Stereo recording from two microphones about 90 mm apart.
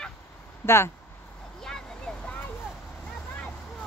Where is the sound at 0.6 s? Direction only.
30° left (ahead or behind).